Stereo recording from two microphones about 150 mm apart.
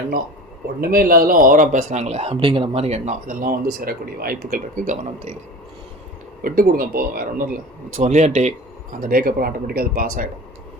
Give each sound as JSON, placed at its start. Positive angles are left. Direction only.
{"t": 0.8, "sound": "speech", "side_deg": -75}
{"t": 3.2, "sound": "speech", "side_deg": -75}
{"t": 6.4, "sound": "speech", "side_deg": -70}